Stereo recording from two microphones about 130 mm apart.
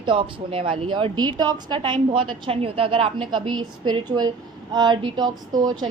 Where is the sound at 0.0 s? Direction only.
40° right (ahead or behind).